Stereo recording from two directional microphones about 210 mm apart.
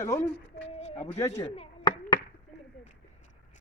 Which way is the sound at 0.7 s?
30° left (ahead or behind).